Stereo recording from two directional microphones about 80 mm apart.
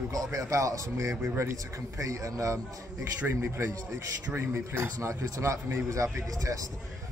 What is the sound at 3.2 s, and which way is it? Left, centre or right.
A man's voice, right.